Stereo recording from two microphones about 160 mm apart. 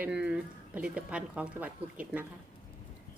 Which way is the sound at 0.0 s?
5° right (ahead or behind).